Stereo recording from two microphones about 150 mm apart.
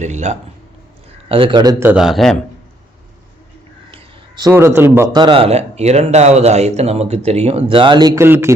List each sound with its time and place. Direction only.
0.0 s speech: 50° right (ahead or behind)
1.3 s speech: 35° right (ahead or behind)
1.8 s a man's voice: 10° right (ahead or behind)
3.9 s a sound: 30° right (ahead or behind)
4.5 s speech: 15° right (ahead or behind)
5.1 s speech: 30° right (ahead or behind)